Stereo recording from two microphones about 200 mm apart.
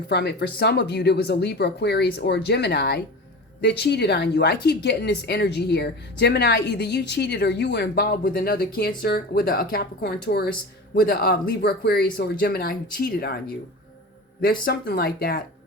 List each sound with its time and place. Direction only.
0.1 s a woman's voice: 55° left (ahead or behind)
14.6 s speech: 50° left (ahead or behind)